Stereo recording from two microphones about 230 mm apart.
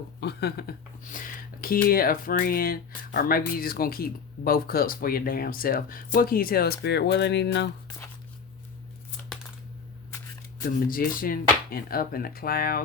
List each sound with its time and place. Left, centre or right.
0.2 s speech: left
10.6 s speech: left